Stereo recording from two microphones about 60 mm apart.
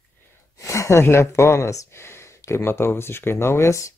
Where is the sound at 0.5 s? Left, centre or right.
Left.